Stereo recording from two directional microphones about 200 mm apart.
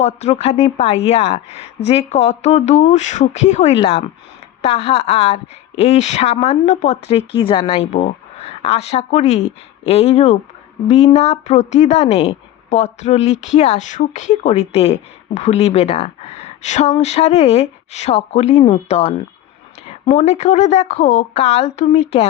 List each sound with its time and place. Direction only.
0.0 s speech: 35° left (ahead or behind)